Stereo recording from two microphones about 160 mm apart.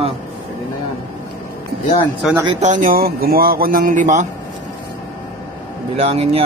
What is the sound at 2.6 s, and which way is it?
Speech, 50° right (ahead or behind).